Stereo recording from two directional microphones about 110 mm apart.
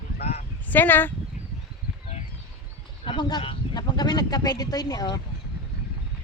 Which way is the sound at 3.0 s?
55° left (ahead or behind).